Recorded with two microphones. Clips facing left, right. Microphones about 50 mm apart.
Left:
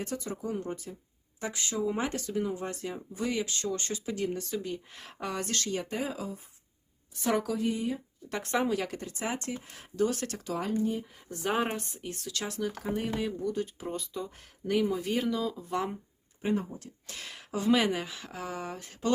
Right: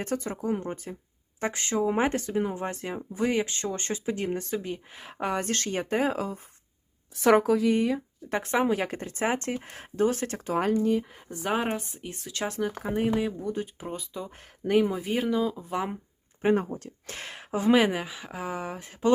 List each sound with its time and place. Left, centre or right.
0.0 s speech: right
4.9 s speech: centre
5.1 s speech: right
7.1 s speech: right
7.5 s speech: right
8.3 s speech: right
10.7 s speech: right
11.3 s speech: centre
12.1 s speech: right
13.8 s speech: centre
14.7 s speech: right
14.9 s speech: centre
16.4 s speech: right